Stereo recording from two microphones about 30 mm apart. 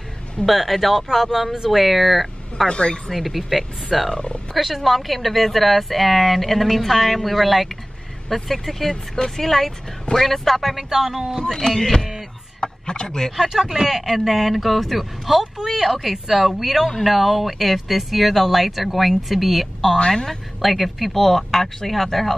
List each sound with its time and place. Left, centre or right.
0.5 s speech: centre
10.6 s speech: centre
11.5 s speech: centre
12.8 s speech: left
13.4 s speech: centre